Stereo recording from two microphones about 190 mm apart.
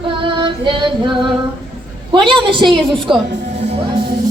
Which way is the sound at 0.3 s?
25° right (ahead or behind).